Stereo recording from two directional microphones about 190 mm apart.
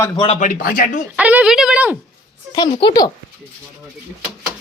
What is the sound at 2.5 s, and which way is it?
Speech, 25° left (ahead or behind).